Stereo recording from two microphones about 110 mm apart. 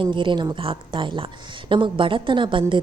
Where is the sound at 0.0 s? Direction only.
45° right (ahead or behind).